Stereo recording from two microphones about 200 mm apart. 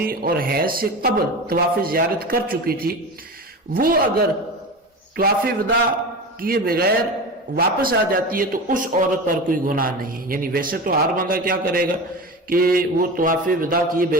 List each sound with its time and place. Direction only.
0.0 s a man's voice: 50° right (ahead or behind)